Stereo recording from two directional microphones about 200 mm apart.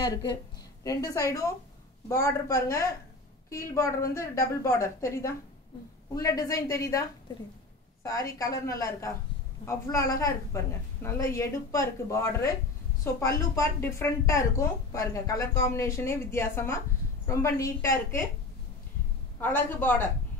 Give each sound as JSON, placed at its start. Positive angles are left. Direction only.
{"t": 0.0, "sound": "speech", "side_deg": 20}
{"t": 19.4, "sound": "speech", "side_deg": 10}